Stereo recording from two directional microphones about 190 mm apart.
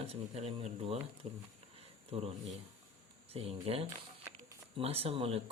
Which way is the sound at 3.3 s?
30° right (ahead or behind).